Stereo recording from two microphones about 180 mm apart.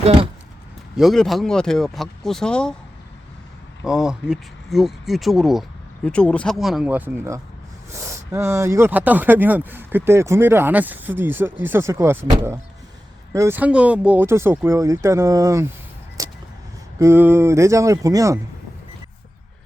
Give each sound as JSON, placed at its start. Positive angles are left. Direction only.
{"t": 0.9, "sound": "speech", "side_deg": 0}
{"t": 3.8, "sound": "speech", "side_deg": -5}
{"t": 13.3, "sound": "speech", "side_deg": -15}
{"t": 16.2, "sound": "vehicle", "side_deg": -20}
{"t": 17.0, "sound": "speech", "side_deg": -15}